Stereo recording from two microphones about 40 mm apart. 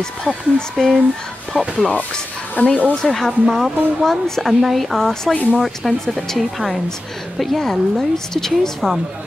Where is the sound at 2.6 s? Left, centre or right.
Left.